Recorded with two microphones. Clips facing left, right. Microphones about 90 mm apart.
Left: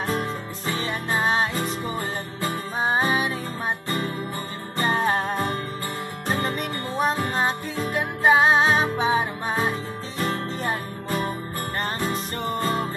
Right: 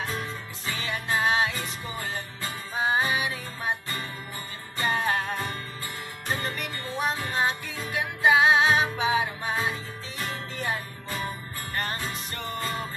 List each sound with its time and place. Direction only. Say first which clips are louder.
0.0 s music: left 6 dB; 45° left (ahead or behind)
0.7 s music: left 2 dB; 35° left (ahead or behind)